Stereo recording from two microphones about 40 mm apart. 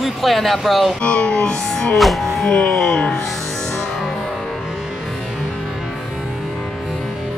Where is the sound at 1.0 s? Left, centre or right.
Left.